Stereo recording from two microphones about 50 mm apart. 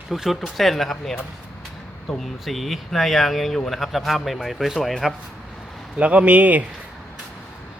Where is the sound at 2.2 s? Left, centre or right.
Centre.